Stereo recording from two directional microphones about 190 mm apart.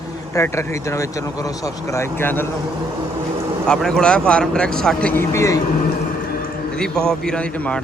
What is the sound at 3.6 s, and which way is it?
A man's voice, 5° left (ahead or behind).